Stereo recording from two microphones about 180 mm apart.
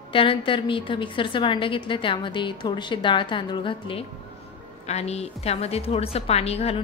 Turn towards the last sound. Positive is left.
turn(degrees=35)  # may be behind; listen again after turning